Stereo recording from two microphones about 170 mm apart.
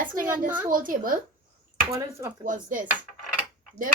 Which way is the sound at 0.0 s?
55° right (ahead or behind).